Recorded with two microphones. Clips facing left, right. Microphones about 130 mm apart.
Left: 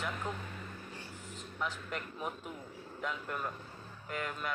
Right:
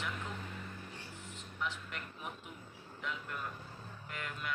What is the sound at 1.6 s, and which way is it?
A man's voice, 40° left (ahead or behind).